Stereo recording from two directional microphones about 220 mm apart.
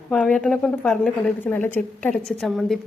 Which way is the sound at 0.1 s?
5° left (ahead or behind).